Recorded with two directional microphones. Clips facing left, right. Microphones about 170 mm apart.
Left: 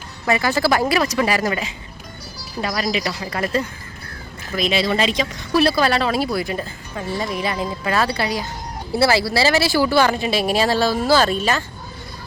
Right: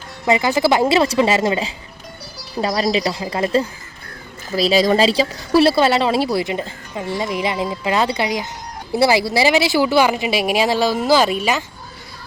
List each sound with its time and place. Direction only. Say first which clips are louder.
0.3 s speech: right 3 dB; 20° right (ahead or behind)